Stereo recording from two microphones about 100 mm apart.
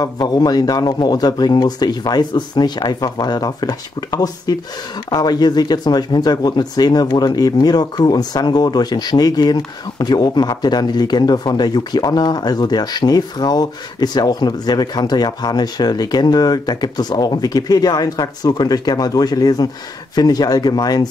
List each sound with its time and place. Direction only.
0.0 s speech: 45° left (ahead or behind)